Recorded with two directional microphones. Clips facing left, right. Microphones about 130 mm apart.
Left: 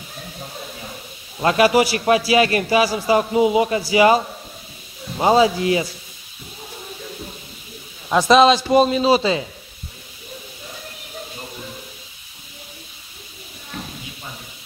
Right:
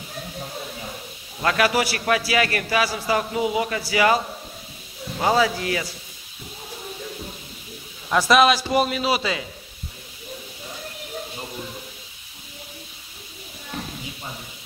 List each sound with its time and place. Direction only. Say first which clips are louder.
1.4 s a man's voice: left 6 dB; 20° left (ahead or behind)
8.1 s a man's voice: left 4 dB; 20° left (ahead or behind)